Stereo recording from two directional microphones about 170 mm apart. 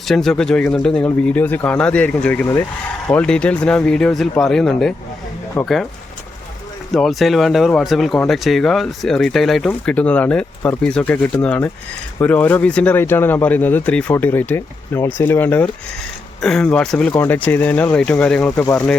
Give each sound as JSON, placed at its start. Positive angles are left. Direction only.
{"t": 0.1, "sound": "speech", "side_deg": 0}
{"t": 6.9, "sound": "speech", "side_deg": 0}